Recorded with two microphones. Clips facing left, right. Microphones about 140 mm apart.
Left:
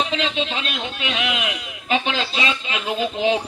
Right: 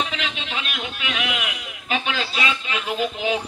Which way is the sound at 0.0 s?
25° left (ahead or behind).